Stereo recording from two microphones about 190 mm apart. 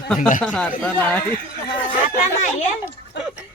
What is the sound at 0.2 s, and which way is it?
Speech, 40° left (ahead or behind).